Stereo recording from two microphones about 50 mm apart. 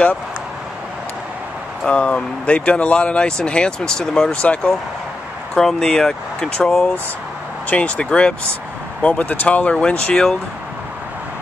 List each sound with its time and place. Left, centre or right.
1.9 s speech: left
5.5 s speech: centre
7.7 s speech: left
9.2 s speech: left